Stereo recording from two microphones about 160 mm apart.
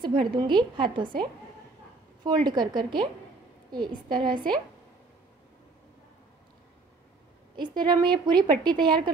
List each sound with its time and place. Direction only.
0.0 s a woman's voice: 30° right (ahead or behind)
7.5 s a woman's voice: 30° right (ahead or behind)